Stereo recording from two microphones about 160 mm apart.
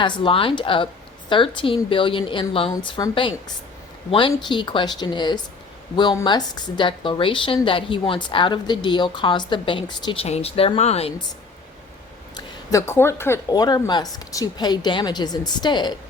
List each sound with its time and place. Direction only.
0.0 s a woman's voice: 30° left (ahead or behind)
12.7 s a woman's voice: 15° left (ahead or behind)